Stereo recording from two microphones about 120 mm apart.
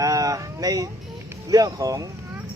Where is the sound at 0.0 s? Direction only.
30° right (ahead or behind).